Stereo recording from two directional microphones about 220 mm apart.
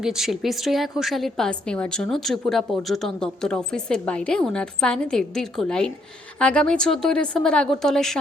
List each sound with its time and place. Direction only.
0.0 s a woman's voice: centre (ahead or behind)